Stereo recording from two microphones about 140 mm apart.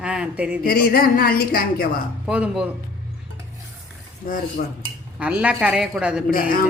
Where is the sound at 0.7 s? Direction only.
90° left.